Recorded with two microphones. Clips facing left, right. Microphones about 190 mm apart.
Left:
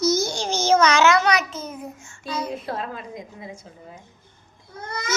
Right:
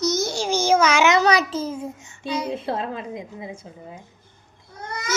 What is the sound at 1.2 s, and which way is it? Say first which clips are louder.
A child's voice: right 3 dB; 30° right (ahead or behind).